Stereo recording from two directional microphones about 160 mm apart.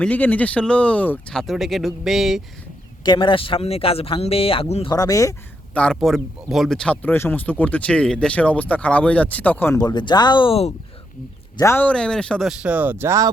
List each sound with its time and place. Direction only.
0.0 s speech: 10° left (ahead or behind)
3.0 s speech: 30° left (ahead or behind)
4.9 s speech: 20° left (ahead or behind)
5.7 s speech: 5° left (ahead or behind)
9.8 s speech: 25° left (ahead or behind)
11.5 s speech: 15° left (ahead or behind); by 13.3 s 20° right (ahead or behind)